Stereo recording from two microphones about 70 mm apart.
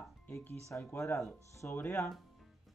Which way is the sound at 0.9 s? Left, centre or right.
Left.